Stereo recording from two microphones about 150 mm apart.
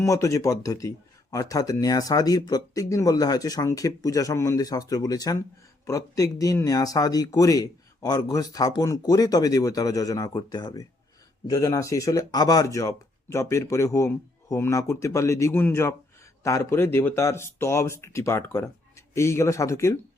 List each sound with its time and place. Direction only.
0.0 s speech: 20° left (ahead or behind)